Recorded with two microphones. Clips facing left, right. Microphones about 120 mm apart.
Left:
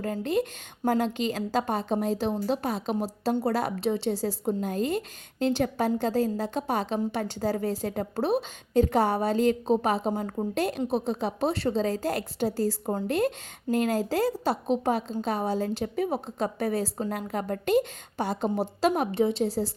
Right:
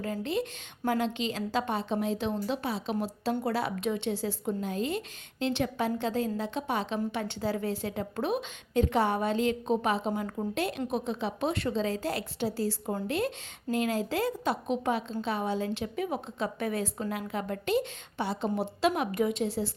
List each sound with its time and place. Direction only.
0.0 s a woman's voice: 45° left (ahead or behind)